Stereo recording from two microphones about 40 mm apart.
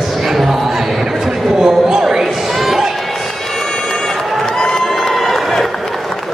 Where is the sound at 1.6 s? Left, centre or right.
Centre.